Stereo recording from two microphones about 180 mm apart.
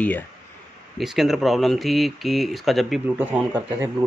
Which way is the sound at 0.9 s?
Centre (ahead or behind).